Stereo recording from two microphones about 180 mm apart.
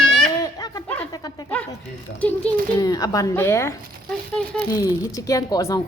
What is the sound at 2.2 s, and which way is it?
Speech, 5° left (ahead or behind).